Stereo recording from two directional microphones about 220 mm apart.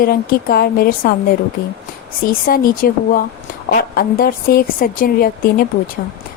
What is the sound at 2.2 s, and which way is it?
A woman's voice, 40° left (ahead or behind).